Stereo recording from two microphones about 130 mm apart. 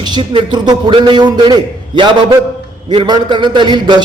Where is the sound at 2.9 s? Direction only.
40° right (ahead or behind).